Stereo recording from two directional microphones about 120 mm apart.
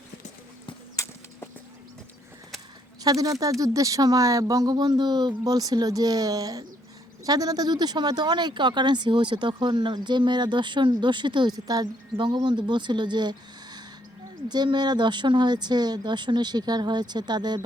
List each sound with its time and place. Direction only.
3.0 s speech: 30° right (ahead or behind)